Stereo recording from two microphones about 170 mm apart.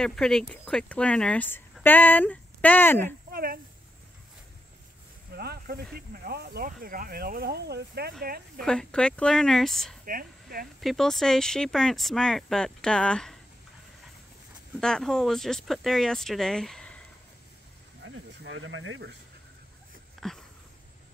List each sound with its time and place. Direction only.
0.0 s speech: 5° left (ahead or behind)
3.3 s a sound: 60° right (ahead or behind)
5.3 s speech: 65° right (ahead or behind)
8.5 s speech: 5° left (ahead or behind)
10.0 s speech: 60° right (ahead or behind)
10.8 s speech: centre (ahead or behind)
14.8 s speech: 5° left (ahead or behind)
18.0 s speech: 90° right
20.2 s a sound: centre (ahead or behind)